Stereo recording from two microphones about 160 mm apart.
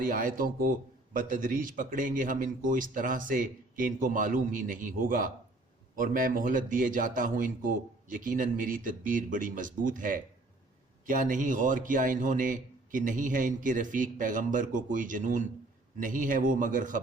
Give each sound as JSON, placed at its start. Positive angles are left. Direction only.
{"t": 0.0, "sound": "speech", "side_deg": -60}